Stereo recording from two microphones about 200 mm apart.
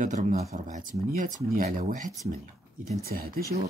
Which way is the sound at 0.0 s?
40° right (ahead or behind).